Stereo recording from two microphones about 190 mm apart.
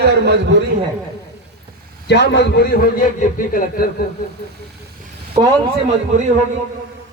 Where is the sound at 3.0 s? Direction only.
45° left (ahead or behind).